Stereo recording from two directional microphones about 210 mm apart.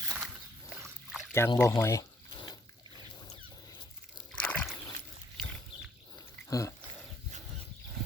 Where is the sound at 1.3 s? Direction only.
10° left (ahead or behind).